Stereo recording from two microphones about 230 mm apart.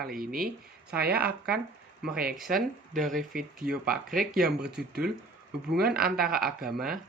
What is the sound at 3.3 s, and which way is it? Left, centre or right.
Speech, right.